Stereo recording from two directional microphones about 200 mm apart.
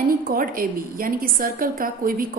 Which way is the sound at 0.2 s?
45° right (ahead or behind).